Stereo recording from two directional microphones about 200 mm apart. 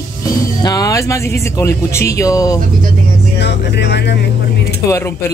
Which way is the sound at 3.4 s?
60° left (ahead or behind).